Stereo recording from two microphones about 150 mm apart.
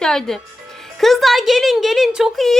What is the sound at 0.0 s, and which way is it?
A woman's voice, 5° left (ahead or behind).